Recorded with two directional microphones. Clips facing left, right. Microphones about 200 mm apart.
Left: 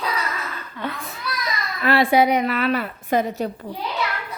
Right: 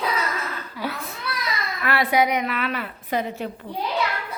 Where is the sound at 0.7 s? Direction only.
5° right (ahead or behind).